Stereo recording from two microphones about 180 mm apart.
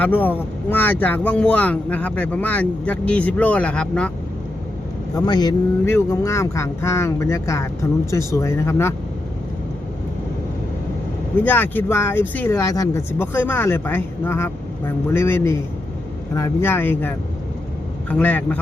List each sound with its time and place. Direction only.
0.0 s speech: 10° left (ahead or behind)
5.1 s speech: 20° left (ahead or behind)
11.3 s speech: 10° left (ahead or behind)